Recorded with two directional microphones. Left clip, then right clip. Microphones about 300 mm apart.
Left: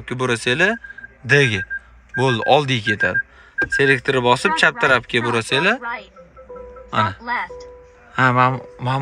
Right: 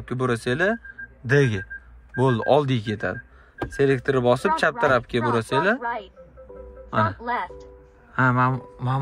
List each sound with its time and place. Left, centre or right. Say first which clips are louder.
0.0 s speech: left 4 dB; centre
6.9 s a man's voice: left 3 dB; centre